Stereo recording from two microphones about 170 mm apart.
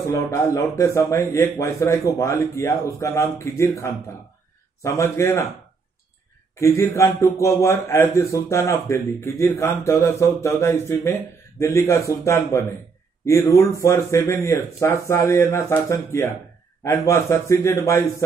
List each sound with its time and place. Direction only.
0.0 s a man's voice: 15° left (ahead or behind)
6.5 s a man's voice: 15° left (ahead or behind)